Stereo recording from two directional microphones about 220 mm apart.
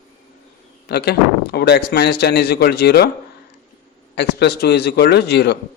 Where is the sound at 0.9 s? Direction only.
45° left (ahead or behind).